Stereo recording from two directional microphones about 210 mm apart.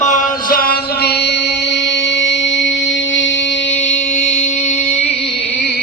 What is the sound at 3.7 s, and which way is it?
Music, 35° left (ahead or behind).